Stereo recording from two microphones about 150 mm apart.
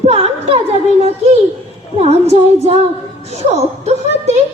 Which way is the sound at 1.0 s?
45° right (ahead or behind).